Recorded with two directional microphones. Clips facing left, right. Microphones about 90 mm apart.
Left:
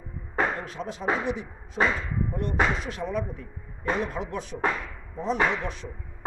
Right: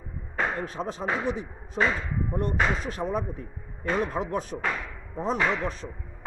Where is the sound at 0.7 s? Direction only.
40° right (ahead or behind).